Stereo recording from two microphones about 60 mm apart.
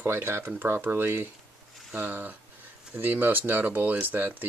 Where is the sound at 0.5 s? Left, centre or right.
Right.